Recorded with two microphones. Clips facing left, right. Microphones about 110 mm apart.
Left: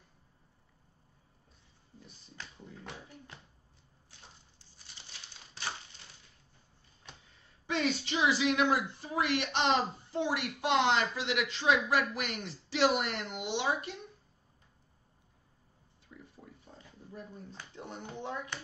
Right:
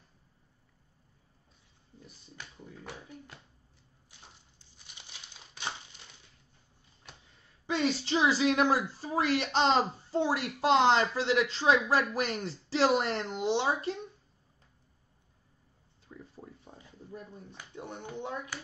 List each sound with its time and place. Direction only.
2.3 s speech: 5° right (ahead or behind)
7.6 s speech: 30° right (ahead or behind)
17.6 s speech: 15° right (ahead or behind)